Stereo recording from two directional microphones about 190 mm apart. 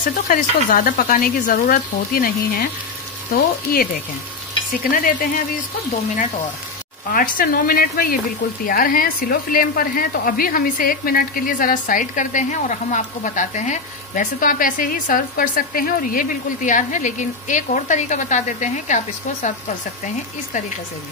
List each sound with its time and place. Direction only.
0.3 s speech: 45° left (ahead or behind)
7.1 s speech: 50° left (ahead or behind)